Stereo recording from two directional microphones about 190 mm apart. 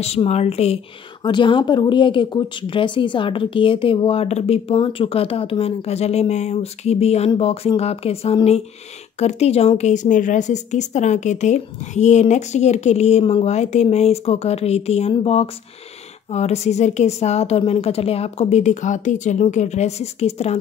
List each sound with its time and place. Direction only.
0.0 s a woman's voice: 35° left (ahead or behind)